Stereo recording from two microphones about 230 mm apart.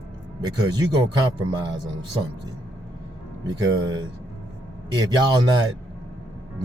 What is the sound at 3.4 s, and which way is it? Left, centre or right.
A man's voice, centre.